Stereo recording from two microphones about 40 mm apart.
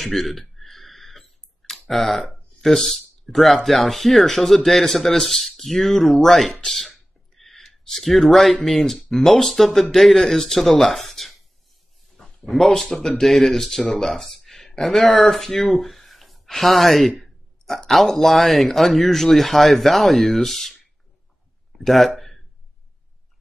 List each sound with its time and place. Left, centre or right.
0.0 s clicking: centre
2.6 s speech: centre
12.4 s speech: centre
21.7 s a sound: centre